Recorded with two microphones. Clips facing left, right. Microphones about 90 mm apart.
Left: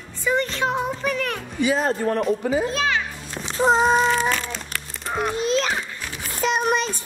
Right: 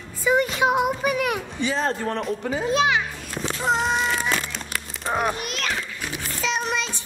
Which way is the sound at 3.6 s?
35° left (ahead or behind).